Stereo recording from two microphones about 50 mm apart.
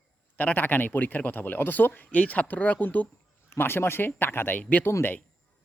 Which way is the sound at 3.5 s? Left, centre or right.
Left.